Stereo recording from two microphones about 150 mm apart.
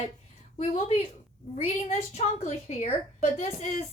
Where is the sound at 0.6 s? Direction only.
50° left (ahead or behind).